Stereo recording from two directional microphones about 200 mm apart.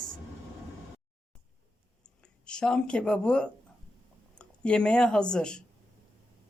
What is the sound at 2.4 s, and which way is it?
Speech, 5° left (ahead or behind).